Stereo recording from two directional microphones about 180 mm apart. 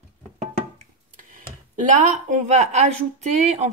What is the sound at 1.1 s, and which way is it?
Speech, 50° right (ahead or behind).